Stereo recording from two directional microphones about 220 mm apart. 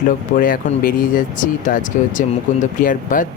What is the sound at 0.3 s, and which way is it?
Speech, 40° left (ahead or behind).